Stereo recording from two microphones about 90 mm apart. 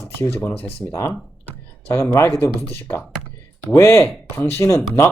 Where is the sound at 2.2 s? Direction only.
30° left (ahead or behind).